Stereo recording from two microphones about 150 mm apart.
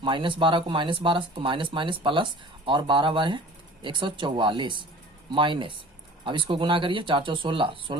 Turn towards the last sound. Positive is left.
turn(degrees=-35)  # may be behind; listen again after turning